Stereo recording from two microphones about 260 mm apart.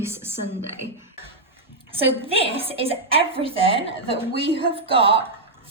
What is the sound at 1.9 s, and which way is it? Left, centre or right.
A woman's voice, right.